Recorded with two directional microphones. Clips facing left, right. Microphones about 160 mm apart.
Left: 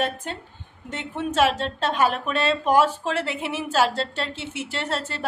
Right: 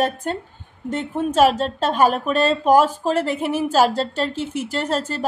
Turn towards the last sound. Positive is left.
turn(degrees=-45)  # may be behind; listen again after turning